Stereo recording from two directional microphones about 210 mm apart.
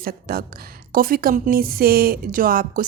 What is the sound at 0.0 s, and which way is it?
Speech, 45° right (ahead or behind).